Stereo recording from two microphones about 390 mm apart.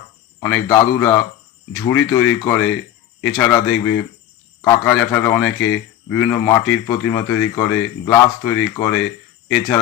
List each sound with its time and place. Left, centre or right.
0.3 s speech: centre
2.6 s a sound: left
3.2 s speech: centre